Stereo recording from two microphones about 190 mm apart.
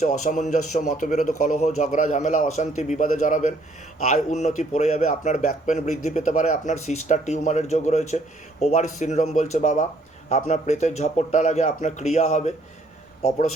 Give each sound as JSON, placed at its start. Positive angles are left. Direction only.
{"t": 0.0, "sound": "speech", "side_deg": 40}